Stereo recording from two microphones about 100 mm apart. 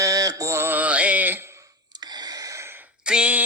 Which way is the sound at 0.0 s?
35° right (ahead or behind).